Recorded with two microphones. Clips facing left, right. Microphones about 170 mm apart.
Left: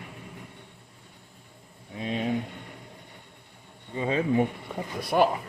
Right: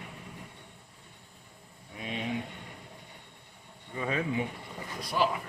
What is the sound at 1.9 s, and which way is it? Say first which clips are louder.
Speech: left 7 dB; 30° left (ahead or behind).